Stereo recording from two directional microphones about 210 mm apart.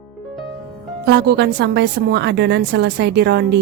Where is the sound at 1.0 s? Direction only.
55° right (ahead or behind).